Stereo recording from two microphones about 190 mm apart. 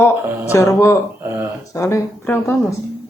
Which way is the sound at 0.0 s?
15° left (ahead or behind).